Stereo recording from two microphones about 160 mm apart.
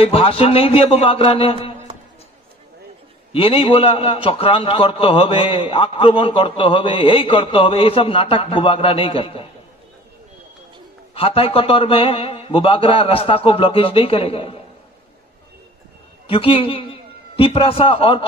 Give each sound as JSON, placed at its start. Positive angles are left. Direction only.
{"t": 0.0, "sound": "a man's voice", "side_deg": 35}
{"t": 3.3, "sound": "a man's voice", "side_deg": 35}
{"t": 11.1, "sound": "a man's voice", "side_deg": 35}
{"t": 16.3, "sound": "a man's voice", "side_deg": 35}